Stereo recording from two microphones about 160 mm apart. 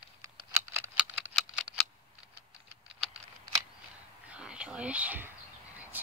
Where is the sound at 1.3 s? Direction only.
Centre (ahead or behind).